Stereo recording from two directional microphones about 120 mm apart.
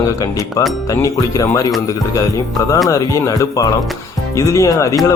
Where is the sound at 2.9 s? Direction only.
25° left (ahead or behind).